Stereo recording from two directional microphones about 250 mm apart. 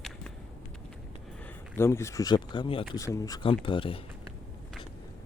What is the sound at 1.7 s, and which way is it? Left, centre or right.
Speech, centre.